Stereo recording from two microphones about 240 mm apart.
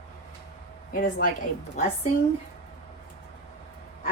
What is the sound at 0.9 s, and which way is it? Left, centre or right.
Speech, left.